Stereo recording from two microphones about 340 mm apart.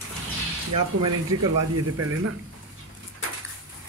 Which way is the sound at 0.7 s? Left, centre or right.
Right.